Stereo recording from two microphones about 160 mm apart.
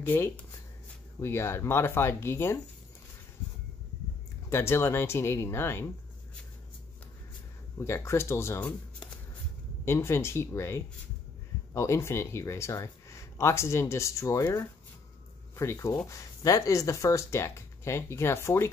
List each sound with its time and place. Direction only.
0.0 s speech: 15° left (ahead or behind)
4.5 s speech: 15° left (ahead or behind)
7.8 s speech: 15° left (ahead or behind)